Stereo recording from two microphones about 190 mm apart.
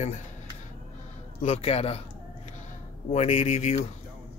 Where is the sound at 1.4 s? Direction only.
30° left (ahead or behind).